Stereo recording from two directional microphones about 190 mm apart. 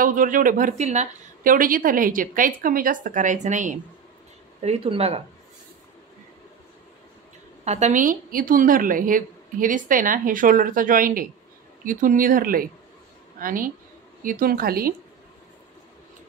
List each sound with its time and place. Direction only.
0.0 s a woman's voice: 45° right (ahead or behind)
7.6 s a woman's voice: 35° right (ahead or behind)